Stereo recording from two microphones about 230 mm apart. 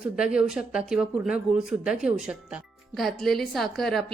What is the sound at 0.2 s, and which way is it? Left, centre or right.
A woman's voice, centre.